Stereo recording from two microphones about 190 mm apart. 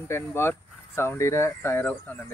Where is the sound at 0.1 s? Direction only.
10° left (ahead or behind).